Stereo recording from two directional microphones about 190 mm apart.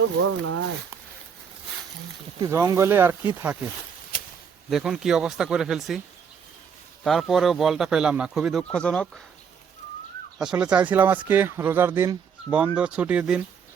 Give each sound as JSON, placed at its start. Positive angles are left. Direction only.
{"t": 0.4, "sound": "speech", "side_deg": -90}
{"t": 2.4, "sound": "speech", "side_deg": -15}
{"t": 4.7, "sound": "speech", "side_deg": -5}
{"t": 7.0, "sound": "speech", "side_deg": 0}
{"t": 10.3, "sound": "speech", "side_deg": -5}